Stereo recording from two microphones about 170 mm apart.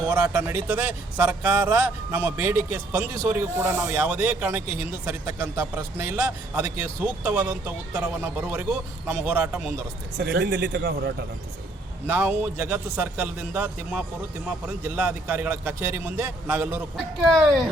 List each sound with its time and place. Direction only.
0.0 s speech: 10° right (ahead or behind)
10.2 s speech: 75° right (ahead or behind)
12.0 s speech: 15° right (ahead or behind)
17.3 s speech: centre (ahead or behind)